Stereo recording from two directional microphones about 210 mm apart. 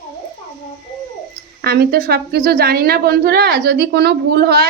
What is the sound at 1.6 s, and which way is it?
A woman's voice, 50° right (ahead or behind).